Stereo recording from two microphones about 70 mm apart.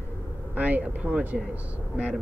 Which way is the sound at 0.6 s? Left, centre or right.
Right.